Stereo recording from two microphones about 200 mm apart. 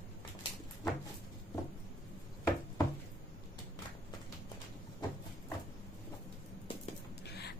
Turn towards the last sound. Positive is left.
turn(degrees=55)  # may be behind; listen again after turning